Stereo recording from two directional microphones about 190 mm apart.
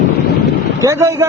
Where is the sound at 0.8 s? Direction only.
15° right (ahead or behind).